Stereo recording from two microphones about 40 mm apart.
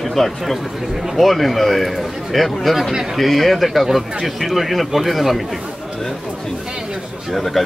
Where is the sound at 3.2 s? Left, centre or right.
Centre.